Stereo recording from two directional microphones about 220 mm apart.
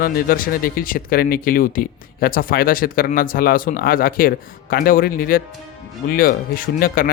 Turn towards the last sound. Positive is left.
turn(degrees=40)  # may be behind; listen again after turning